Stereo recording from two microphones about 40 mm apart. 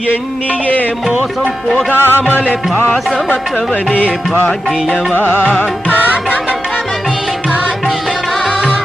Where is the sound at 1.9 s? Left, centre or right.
Left.